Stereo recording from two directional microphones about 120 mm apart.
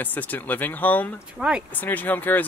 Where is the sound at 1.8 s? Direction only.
15° left (ahead or behind).